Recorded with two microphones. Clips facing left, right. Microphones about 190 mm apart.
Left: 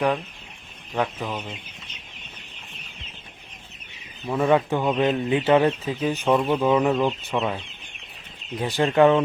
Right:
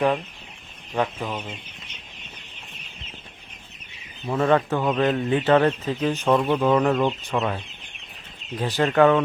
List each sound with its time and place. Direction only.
0.9 s speech: 10° right (ahead or behind)
4.4 s speech: 15° left (ahead or behind)
8.5 s speech: 10° left (ahead or behind)
8.9 s speech: 20° left (ahead or behind)